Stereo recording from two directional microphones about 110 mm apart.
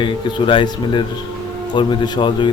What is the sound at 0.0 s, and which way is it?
Speech, 45° left (ahead or behind).